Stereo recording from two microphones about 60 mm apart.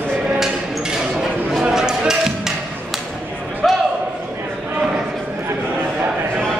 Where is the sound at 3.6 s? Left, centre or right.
Centre.